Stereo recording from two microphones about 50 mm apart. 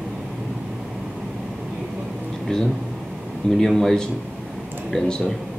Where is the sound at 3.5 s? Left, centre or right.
Centre.